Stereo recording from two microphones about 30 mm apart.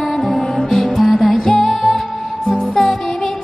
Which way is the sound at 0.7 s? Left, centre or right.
Centre.